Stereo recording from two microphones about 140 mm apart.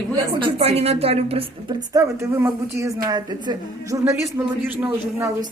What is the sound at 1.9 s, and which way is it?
A man's voice, 20° right (ahead or behind).